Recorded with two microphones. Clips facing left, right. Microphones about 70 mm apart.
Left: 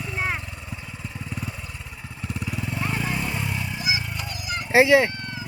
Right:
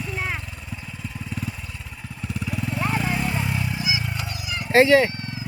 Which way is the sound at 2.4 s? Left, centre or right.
Centre.